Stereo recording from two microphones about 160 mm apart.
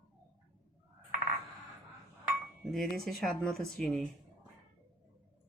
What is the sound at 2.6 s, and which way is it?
Speech, centre (ahead or behind).